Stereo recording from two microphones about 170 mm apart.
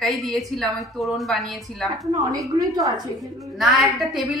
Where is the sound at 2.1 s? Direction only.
20° right (ahead or behind).